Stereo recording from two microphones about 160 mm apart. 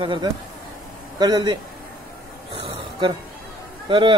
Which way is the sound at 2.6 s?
30° right (ahead or behind).